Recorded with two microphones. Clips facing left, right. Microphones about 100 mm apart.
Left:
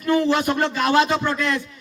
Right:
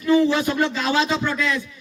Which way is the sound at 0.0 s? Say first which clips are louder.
Right 1 dB; 50° left (ahead or behind).